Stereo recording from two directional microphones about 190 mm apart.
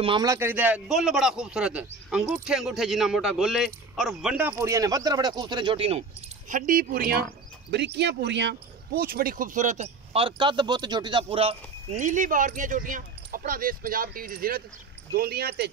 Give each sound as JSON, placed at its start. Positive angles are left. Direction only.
{"t": 0.0, "sound": "a man's voice", "side_deg": -25}
{"t": 6.5, "sound": "speech", "side_deg": -45}
{"t": 9.0, "sound": "speech", "side_deg": -50}